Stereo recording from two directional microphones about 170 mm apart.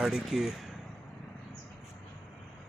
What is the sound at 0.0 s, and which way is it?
Speech, centre (ahead or behind).